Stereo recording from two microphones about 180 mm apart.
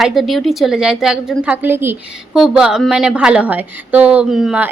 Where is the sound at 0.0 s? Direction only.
Centre (ahead or behind).